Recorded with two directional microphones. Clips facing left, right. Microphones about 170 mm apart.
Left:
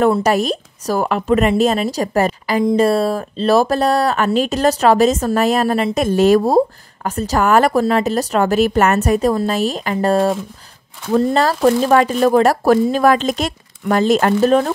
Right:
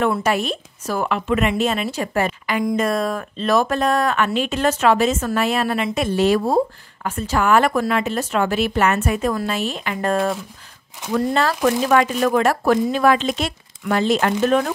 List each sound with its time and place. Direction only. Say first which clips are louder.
0.0 s speech: left 5 dB; 40° left (ahead or behind)